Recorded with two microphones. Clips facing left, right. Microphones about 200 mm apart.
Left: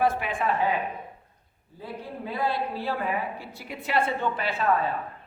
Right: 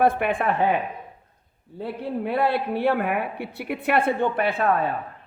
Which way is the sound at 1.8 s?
65° right (ahead or behind).